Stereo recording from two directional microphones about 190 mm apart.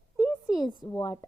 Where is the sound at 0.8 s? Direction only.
20° left (ahead or behind).